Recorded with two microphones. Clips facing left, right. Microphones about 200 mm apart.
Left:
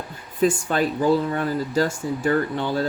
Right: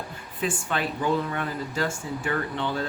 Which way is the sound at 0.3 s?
40° left (ahead or behind).